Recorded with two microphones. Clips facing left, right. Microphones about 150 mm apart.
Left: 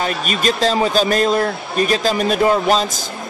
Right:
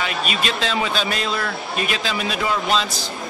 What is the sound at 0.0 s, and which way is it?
Speech, 45° left (ahead or behind).